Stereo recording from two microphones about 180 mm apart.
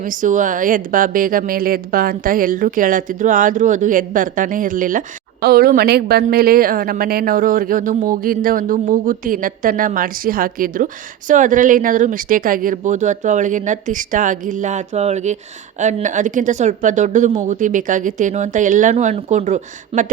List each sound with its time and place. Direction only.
0.0 s a woman's voice: 45° right (ahead or behind)